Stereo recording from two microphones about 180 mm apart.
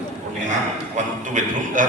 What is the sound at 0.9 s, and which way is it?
Speech, 45° right (ahead or behind).